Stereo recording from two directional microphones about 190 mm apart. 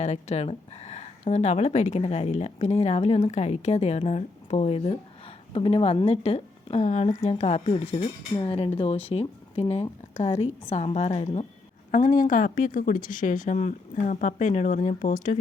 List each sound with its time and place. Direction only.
0.0 s a woman's voice: 35° left (ahead or behind)
11.9 s speech: 45° left (ahead or behind)